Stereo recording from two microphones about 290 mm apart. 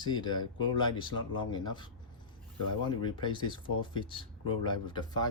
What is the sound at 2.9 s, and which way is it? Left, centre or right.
Speech, centre.